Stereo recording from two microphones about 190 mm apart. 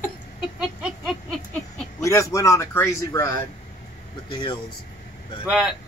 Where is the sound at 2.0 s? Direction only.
15° left (ahead or behind).